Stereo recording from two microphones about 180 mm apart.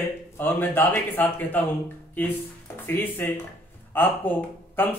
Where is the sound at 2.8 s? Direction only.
10° left (ahead or behind).